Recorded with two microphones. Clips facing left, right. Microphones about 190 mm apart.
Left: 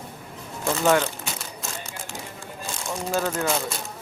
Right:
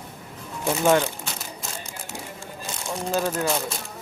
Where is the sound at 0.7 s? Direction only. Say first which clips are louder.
Right 1 dB; 15° right (ahead or behind).